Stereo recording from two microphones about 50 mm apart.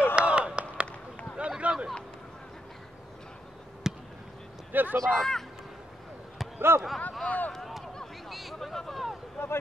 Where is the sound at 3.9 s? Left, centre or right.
Centre.